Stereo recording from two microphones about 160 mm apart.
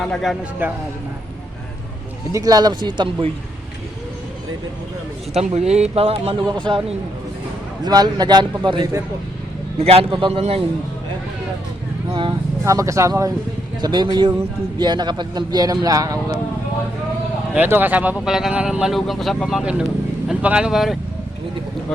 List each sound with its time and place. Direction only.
0.0 s speech: centre (ahead or behind)
0.6 s speech: 10° right (ahead or behind)
2.3 s speech: 25° right (ahead or behind)
5.3 s speech: 40° right (ahead or behind)
9.7 s speech: 40° right (ahead or behind)
12.6 s speech: 20° right (ahead or behind)
17.5 s speech: 10° right (ahead or behind)